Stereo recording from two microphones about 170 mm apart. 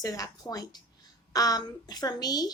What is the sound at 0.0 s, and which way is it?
Speech, 20° left (ahead or behind).